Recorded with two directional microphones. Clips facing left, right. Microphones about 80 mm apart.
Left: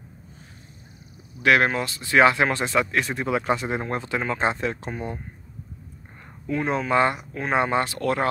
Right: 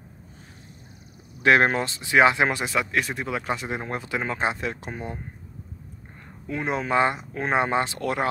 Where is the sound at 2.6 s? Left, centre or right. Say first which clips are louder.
Left 2 dB; centre.